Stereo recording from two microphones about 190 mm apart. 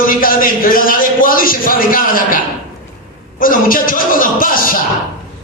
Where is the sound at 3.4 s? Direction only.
50° left (ahead or behind).